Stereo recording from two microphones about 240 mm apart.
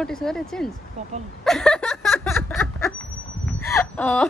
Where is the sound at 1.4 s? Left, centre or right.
Centre.